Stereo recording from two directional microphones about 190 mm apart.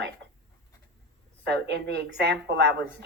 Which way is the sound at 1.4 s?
60° right (ahead or behind).